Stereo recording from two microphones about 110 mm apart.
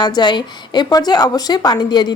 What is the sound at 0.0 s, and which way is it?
A woman's voice, 40° left (ahead or behind).